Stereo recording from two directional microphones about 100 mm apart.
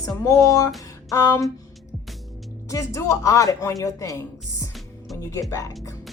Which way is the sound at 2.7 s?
30° left (ahead or behind).